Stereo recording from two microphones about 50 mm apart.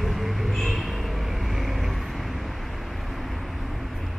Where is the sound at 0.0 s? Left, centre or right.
Centre.